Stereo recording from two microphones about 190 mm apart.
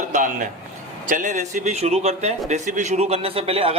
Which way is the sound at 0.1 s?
40° right (ahead or behind).